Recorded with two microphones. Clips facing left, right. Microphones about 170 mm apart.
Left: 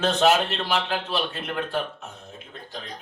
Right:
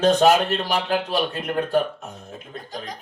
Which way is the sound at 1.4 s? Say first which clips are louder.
Right 6 dB; 40° right (ahead or behind).